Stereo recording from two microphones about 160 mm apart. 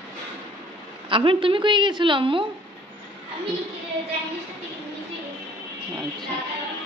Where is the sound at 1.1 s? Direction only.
30° right (ahead or behind).